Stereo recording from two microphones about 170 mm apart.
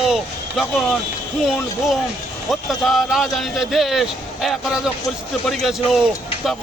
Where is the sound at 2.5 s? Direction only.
Centre (ahead or behind).